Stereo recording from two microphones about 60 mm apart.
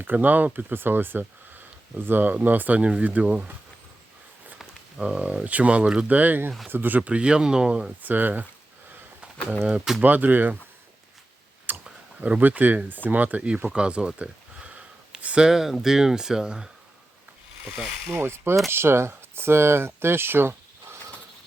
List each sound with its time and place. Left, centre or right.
0.0 s speech: right
5.0 s speech: centre
6.1 s speech: right
8.0 s speech: right
10.0 s speech: right
11.7 s clicking: right
12.2 s speech: right
13.7 s a sound: centre
15.4 s speech: centre
18.2 s speech: right